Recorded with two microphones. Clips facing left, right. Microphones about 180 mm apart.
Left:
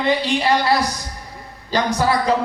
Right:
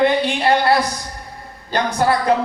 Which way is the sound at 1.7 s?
55° right (ahead or behind).